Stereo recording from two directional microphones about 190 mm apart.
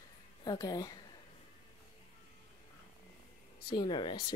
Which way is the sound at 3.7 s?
25° left (ahead or behind).